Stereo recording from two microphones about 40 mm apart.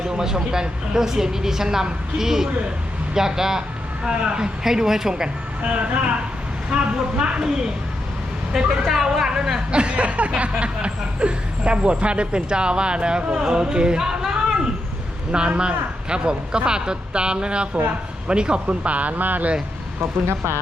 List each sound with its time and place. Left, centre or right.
0.0 s speech: centre
5.6 s speech: right
6.7 s a sound: right
8.5 s speech: centre
9.7 s a sound: right
13.4 s speech: centre
15.3 s a sound: right
18.3 s speech: right
20.0 s speech: right